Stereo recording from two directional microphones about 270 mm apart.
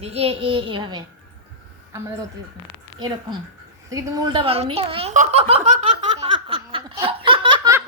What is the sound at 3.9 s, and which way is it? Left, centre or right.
Giggle, centre.